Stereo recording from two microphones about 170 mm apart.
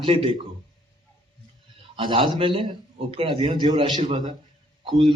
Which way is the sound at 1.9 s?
30° right (ahead or behind).